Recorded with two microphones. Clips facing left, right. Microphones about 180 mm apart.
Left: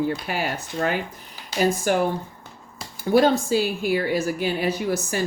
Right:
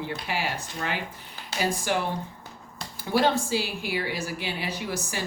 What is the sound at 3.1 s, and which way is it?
A woman's voice, 45° left (ahead or behind).